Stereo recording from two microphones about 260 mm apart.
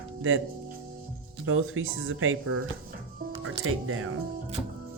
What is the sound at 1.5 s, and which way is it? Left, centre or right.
Speech, right.